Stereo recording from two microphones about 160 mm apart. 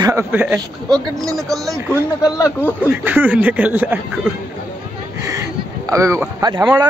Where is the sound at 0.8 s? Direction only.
25° right (ahead or behind).